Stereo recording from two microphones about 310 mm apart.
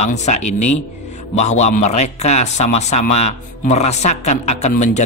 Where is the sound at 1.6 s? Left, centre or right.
Left.